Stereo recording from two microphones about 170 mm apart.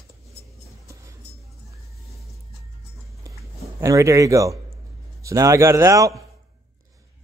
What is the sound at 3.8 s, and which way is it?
Speech, 20° right (ahead or behind).